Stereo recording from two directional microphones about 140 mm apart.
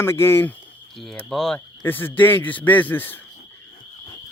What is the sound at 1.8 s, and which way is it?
A man's voice, 15° left (ahead or behind).